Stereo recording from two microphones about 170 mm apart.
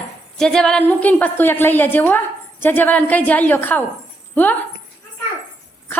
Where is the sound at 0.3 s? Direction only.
5° left (ahead or behind).